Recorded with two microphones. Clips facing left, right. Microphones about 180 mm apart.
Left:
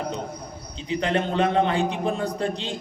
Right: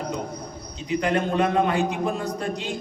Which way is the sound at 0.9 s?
30° left (ahead or behind).